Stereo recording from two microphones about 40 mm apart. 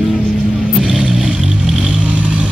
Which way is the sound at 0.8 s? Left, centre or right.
Right.